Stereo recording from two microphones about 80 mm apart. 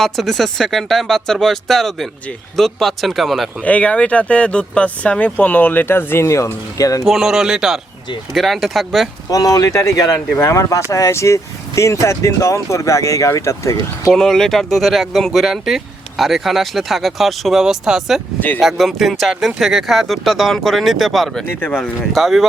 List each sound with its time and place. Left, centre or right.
0.0 s speech: centre
3.6 s speech: centre; by 7.0 s left
7.0 s speech: centre
9.3 s speech: left
14.1 s speech: centre
18.3 s speech: left
18.6 s speech: centre
21.4 s speech: left
21.8 s speech: centre